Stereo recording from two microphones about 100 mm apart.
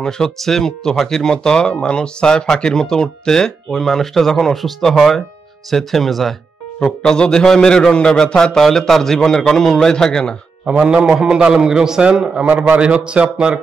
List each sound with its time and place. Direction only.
0.0 s speech: 5° left (ahead or behind)
10.6 s a man's voice: 10° right (ahead or behind)